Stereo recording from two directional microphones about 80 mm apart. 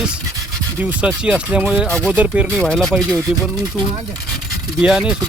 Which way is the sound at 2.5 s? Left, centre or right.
Centre.